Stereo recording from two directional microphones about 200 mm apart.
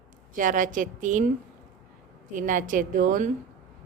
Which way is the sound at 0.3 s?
40° right (ahead or behind).